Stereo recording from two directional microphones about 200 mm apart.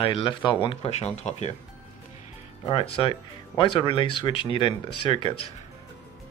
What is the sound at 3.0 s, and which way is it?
Speech, 25° left (ahead or behind).